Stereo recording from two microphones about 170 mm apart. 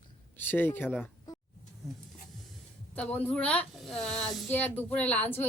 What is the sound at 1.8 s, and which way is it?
Speech, centre (ahead or behind).